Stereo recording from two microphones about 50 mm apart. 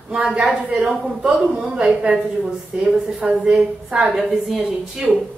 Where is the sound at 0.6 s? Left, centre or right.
Right.